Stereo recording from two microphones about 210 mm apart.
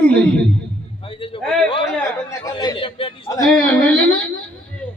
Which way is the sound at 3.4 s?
5° left (ahead or behind).